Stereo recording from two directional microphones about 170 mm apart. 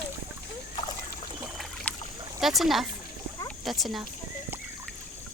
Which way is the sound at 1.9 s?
5° left (ahead or behind).